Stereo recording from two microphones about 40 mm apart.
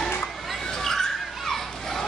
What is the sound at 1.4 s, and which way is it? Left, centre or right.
Children playing, centre.